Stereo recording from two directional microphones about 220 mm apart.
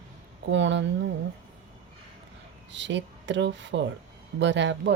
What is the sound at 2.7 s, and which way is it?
Speech, 55° right (ahead or behind).